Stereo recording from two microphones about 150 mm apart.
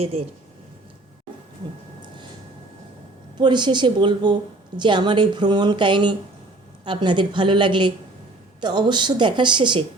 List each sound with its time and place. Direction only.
3.3 s a woman's voice: 30° right (ahead or behind)